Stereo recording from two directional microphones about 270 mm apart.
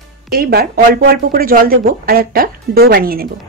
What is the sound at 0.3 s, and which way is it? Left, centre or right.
Speech, right.